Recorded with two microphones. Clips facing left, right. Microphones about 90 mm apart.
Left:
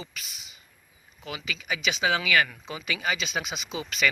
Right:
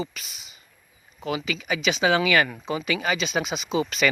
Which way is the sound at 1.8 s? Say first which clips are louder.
Right 5 dB; 40° right (ahead or behind).